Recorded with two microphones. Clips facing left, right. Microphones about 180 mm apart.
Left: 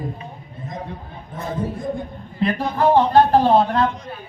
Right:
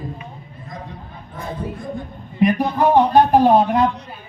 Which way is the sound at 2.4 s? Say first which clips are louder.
Right 3 dB; 15° right (ahead or behind).